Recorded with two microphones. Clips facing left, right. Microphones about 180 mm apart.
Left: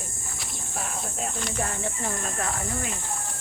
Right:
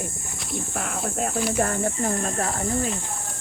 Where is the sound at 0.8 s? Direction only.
60° right (ahead or behind); by 2.9 s 35° right (ahead or behind).